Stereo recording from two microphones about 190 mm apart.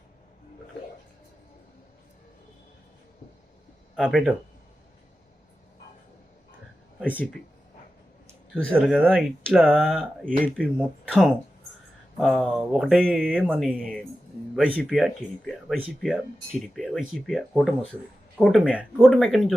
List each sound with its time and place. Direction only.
3.9 s speech: 5° right (ahead or behind)
8.7 s speech: centre (ahead or behind)
10.2 s speech: 45° right (ahead or behind)
10.6 s speech: centre (ahead or behind)
14.8 s speech: centre (ahead or behind)